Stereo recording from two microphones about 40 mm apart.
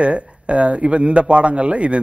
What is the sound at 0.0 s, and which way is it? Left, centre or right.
Speech, right.